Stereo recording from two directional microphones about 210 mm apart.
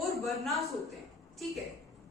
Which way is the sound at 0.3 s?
Centre (ahead or behind).